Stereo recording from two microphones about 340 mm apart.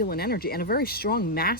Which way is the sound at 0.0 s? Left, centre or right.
Left.